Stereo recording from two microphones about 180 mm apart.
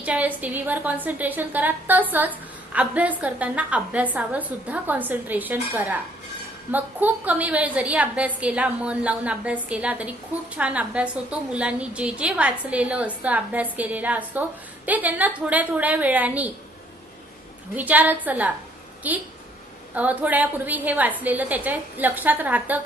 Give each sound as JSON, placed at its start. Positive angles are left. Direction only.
{"t": 0.0, "sound": "a woman's voice", "side_deg": -10}
{"t": 17.7, "sound": "a woman's voice", "side_deg": -10}